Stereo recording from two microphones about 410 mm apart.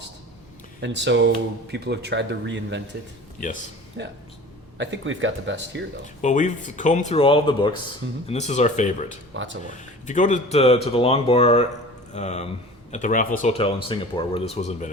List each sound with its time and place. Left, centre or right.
0.8 s speech: right
4.0 s speech: right
6.2 s speech: centre
9.3 s speech: right
9.6 s speech: centre